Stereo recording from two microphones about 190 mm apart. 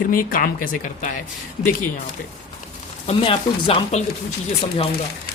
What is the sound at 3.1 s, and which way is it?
Speech, 30° left (ahead or behind).